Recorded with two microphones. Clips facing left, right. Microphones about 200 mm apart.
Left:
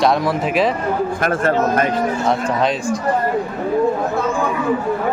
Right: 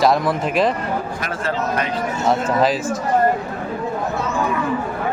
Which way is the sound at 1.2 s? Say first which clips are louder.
Left 9 dB; 50° left (ahead or behind).